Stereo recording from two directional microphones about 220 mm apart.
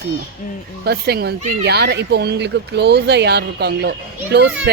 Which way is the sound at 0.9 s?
45° right (ahead or behind).